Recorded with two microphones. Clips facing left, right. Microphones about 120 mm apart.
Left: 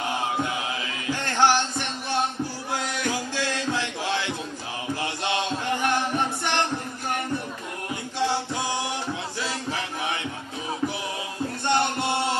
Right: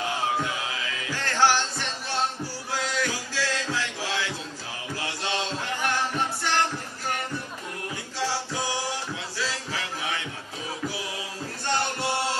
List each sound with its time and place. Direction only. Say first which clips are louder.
1.1 s music: left 2 dB; 20° left (ahead or behind)
8.2 s music: left 3 dB; 20° left (ahead or behind)
9.4 s a sound: right 1 dB; 20° left (ahead or behind)
11.6 s music: left 3 dB; 20° left (ahead or behind)